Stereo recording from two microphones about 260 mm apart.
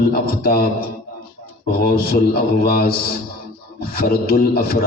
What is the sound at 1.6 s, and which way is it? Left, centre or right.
Speech, left.